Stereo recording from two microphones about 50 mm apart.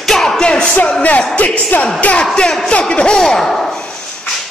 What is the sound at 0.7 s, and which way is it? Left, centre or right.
Speech, left.